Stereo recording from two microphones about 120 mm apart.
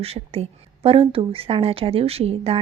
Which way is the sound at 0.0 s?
55° right (ahead or behind).